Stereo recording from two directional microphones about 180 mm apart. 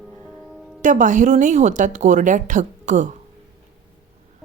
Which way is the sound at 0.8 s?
45° right (ahead or behind).